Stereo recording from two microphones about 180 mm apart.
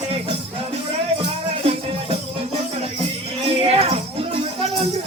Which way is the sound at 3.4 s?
35° right (ahead or behind).